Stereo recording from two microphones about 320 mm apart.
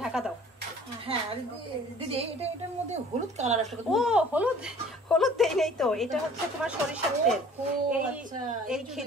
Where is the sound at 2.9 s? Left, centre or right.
Right.